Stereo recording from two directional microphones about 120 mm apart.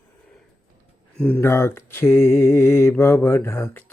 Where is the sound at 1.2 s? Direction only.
15° left (ahead or behind).